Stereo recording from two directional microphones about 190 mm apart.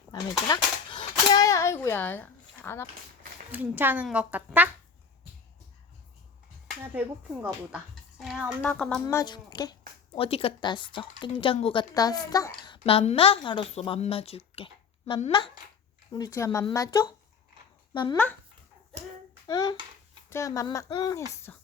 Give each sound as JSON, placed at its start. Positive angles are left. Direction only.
{"t": 0.1, "sound": "a sound", "side_deg": 25}
{"t": 3.5, "sound": "speech", "side_deg": -10}
{"t": 6.9, "sound": "speech", "side_deg": -10}
{"t": 9.1, "sound": "a woman's voice", "side_deg": 25}
{"t": 19.5, "sound": "a woman's voice", "side_deg": 20}
{"t": 21.5, "sound": "speech", "side_deg": 10}